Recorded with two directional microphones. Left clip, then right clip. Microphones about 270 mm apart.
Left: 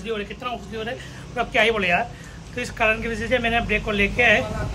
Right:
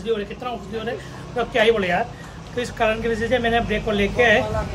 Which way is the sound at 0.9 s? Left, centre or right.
Centre.